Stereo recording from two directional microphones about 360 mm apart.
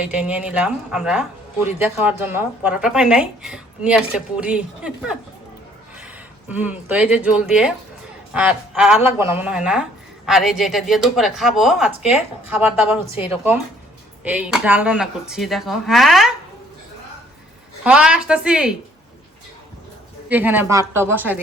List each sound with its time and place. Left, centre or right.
0.0 s a woman's voice: centre
6.5 s a woman's voice: centre
13.1 s speech: centre
14.3 s a woman's voice: centre
17.8 s a woman's voice: centre
20.2 s a woman's voice: centre